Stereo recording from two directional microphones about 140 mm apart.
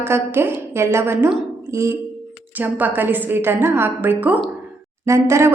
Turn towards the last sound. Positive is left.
turn(degrees=-20)  # may be behind; listen again after turning